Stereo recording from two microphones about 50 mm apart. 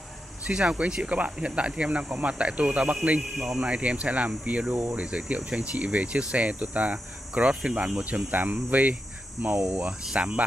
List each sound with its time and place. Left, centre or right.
0.5 s speech: centre
3.2 s speech: centre
3.6 s speech: right